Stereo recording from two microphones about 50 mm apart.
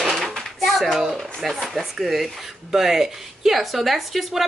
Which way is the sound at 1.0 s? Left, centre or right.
Centre.